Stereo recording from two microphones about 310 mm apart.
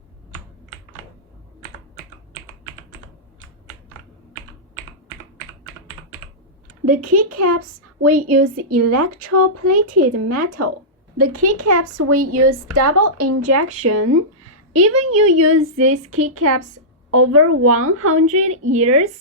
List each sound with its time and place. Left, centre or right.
6.8 s speech: right